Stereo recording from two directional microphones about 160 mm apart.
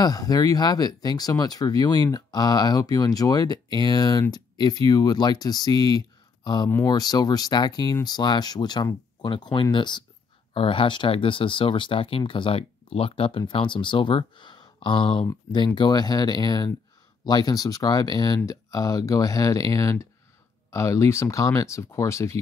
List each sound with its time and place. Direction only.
0.0 s speech: 25° left (ahead or behind)